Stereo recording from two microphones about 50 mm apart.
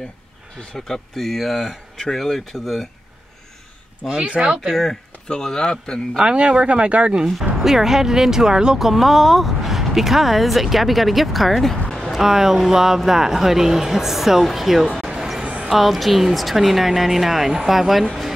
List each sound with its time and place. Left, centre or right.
0.7 s speech: centre
4.2 s speech: centre
4.6 s speech: centre
6.1 s speech: right
7.5 s speech: centre
8.8 s speech: centre
15.0 s a sound: centre
15.4 s music: right
15.7 s speech: centre